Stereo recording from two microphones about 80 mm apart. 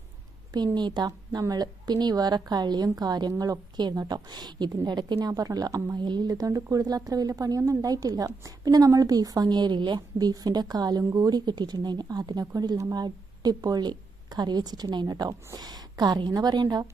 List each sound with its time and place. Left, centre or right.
0.5 s a woman's voice: right